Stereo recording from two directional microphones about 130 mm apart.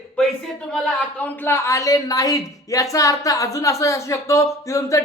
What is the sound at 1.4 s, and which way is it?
A woman's voice, 20° left (ahead or behind).